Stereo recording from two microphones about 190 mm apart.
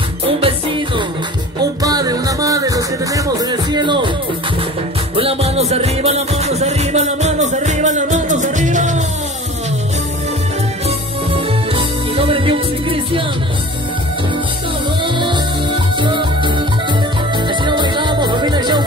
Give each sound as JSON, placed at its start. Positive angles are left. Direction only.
{"t": 0.4, "sound": "music", "side_deg": -25}
{"t": 5.1, "sound": "music", "side_deg": -30}
{"t": 11.3, "sound": "music", "side_deg": -30}
{"t": 15.0, "sound": "music", "side_deg": -25}